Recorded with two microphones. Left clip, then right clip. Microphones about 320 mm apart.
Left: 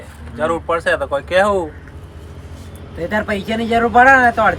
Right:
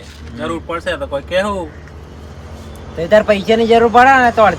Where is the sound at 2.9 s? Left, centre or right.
Centre.